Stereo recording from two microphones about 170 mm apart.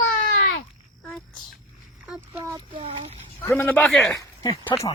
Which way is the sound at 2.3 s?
20° right (ahead or behind).